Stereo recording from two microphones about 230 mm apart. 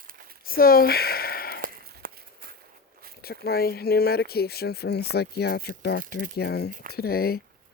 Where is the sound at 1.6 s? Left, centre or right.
Right.